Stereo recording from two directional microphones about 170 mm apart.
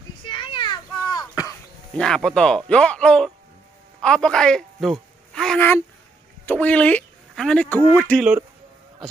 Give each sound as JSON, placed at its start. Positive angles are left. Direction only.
{"t": 0.2, "sound": "child singing", "side_deg": 30}
{"t": 2.0, "sound": "a man's voice", "side_deg": 5}
{"t": 8.2, "sound": "speech", "side_deg": -10}